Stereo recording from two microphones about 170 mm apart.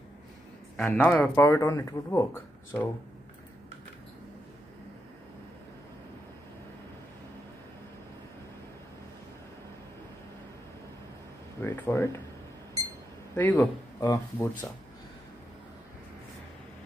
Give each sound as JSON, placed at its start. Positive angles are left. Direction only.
{"t": 0.7, "sound": "speech", "side_deg": 5}
{"t": 11.6, "sound": "speech", "side_deg": 15}
{"t": 13.3, "sound": "speech", "side_deg": 10}